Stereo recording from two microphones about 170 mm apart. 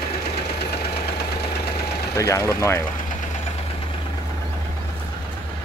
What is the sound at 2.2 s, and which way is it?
Speech, 15° left (ahead or behind).